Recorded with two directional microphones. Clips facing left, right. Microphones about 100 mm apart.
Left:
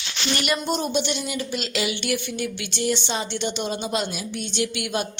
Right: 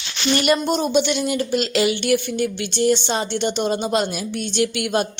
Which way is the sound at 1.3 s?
45° right (ahead or behind).